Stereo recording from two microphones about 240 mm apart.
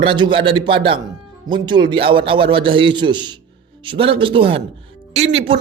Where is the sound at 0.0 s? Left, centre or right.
Right.